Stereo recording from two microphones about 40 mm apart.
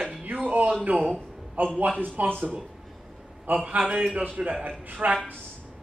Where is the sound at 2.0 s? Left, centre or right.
Right.